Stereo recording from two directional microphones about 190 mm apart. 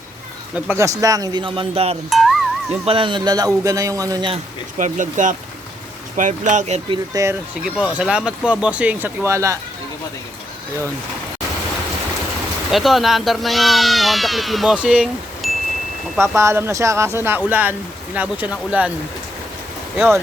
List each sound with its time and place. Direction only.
0.5 s a man's voice: 10° right (ahead or behind); by 2.0 s 30° right (ahead or behind)
2.0 s music: centre (ahead or behind)
2.8 s a man's voice: 25° right (ahead or behind)
4.8 s speech: 40° right (ahead or behind)
7.1 s speech: 15° right (ahead or behind)
7.6 s speech: 5° right (ahead or behind)
12.7 s speech: centre (ahead or behind)
16.2 s speech: 15° right (ahead or behind)
20.0 s speech: 15° right (ahead or behind)